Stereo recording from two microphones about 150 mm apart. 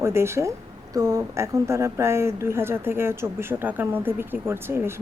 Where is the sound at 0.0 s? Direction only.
15° right (ahead or behind).